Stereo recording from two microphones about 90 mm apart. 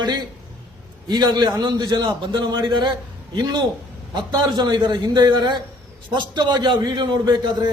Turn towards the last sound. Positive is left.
turn(degrees=-55)  # may be behind; listen again after turning